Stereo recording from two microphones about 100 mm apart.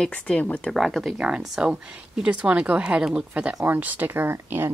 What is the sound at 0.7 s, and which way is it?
Speech, centre (ahead or behind).